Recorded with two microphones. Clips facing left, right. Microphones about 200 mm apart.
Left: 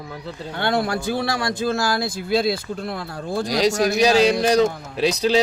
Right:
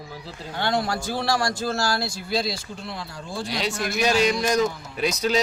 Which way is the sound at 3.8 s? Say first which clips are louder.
Left 4 dB; 35° left (ahead or behind).